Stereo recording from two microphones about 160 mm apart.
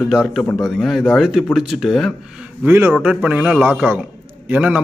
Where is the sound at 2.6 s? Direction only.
15° right (ahead or behind).